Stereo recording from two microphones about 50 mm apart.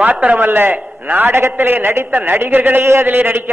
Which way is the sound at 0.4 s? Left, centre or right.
Right.